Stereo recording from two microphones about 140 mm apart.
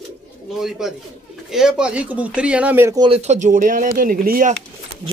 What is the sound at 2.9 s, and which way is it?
Speech, 35° right (ahead or behind).